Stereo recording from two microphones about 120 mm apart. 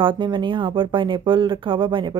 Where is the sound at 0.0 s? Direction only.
40° right (ahead or behind).